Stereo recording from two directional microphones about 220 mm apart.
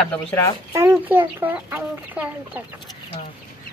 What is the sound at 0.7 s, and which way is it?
Speech, 10° right (ahead or behind).